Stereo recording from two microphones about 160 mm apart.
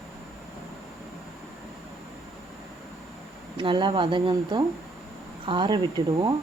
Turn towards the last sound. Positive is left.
turn(degrees=-30)  # may be behind; listen again after turning